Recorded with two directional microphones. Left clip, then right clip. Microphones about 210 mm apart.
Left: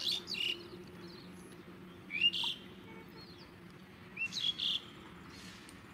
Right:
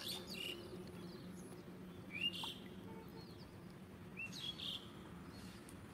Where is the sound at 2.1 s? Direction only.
45° right (ahead or behind).